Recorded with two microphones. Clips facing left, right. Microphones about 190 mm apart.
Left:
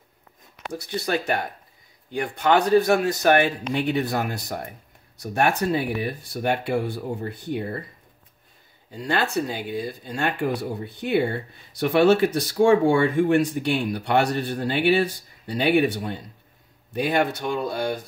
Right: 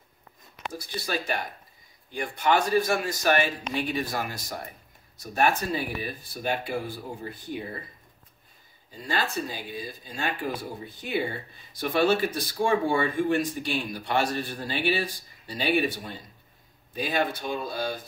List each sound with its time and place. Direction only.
0.7 s speech: 65° left (ahead or behind)
8.9 s speech: 65° left (ahead or behind)